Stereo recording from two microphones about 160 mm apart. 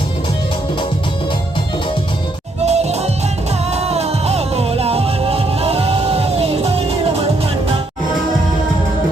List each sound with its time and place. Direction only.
2.6 s music: 40° right (ahead or behind)